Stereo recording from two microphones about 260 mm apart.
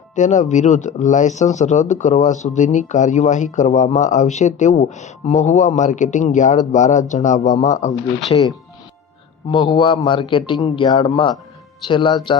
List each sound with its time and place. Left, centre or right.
0.2 s speech: left